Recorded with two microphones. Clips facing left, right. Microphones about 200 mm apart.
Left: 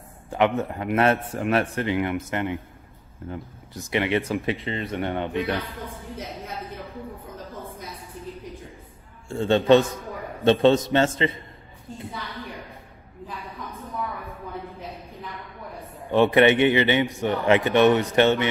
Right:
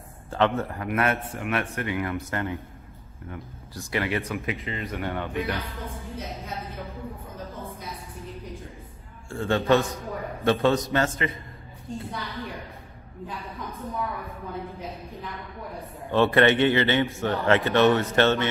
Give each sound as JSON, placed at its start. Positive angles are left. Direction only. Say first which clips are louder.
{"t": 0.6, "sound": "a man's voice", "louder": "left 4 dB", "side_deg": 20}
{"t": 9.3, "sound": "speech", "louder": "left 5 dB", "side_deg": 20}
{"t": 12.1, "sound": "a woman's voice", "louder": "right 1 dB", "side_deg": 0}
{"t": 13.3, "sound": "a sound", "louder": "even", "side_deg": 0}
{"t": 16.1, "sound": "a man's voice", "louder": "left 2 dB", "side_deg": 15}